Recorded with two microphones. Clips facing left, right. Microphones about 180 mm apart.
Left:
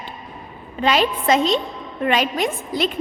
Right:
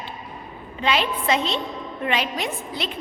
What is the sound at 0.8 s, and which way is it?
A woman's voice, 40° left (ahead or behind).